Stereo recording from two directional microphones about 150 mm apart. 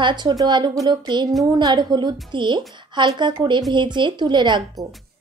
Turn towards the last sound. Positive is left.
turn(degrees=-30)  # may be behind; listen again after turning